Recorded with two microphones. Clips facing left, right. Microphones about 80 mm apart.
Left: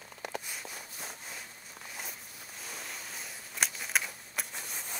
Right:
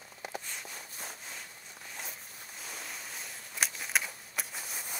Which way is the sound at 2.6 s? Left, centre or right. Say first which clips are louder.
Even; centre.